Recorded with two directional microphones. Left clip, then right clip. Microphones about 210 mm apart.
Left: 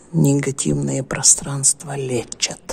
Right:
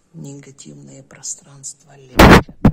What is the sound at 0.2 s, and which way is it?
Speech, 40° left (ahead or behind).